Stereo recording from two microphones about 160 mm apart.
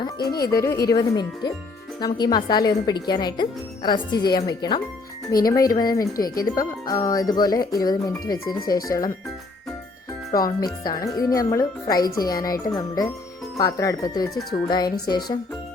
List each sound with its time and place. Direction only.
0.0 s speech: 25° left (ahead or behind)
10.3 s speech: 25° left (ahead or behind)